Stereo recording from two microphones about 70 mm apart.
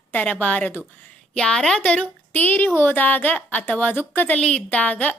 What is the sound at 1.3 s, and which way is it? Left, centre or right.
A woman's voice, centre.